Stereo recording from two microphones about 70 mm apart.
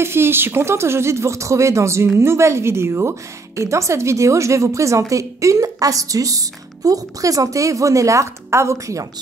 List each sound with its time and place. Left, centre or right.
0.0 s a woman's voice: right